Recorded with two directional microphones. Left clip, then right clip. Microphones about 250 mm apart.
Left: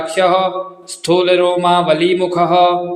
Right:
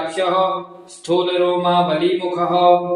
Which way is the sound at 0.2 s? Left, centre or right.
Left.